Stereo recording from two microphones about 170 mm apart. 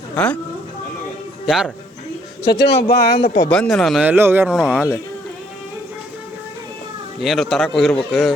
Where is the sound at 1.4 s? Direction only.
5° right (ahead or behind).